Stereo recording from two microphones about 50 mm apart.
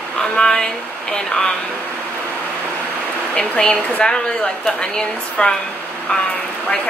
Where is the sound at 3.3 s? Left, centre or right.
Left.